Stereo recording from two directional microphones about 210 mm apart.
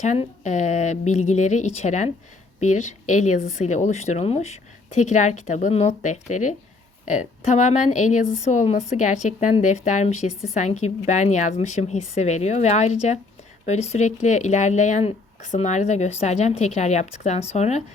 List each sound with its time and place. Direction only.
0.0 s speech: 35° left (ahead or behind)